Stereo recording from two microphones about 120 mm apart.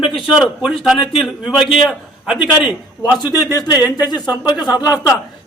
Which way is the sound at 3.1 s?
30° left (ahead or behind).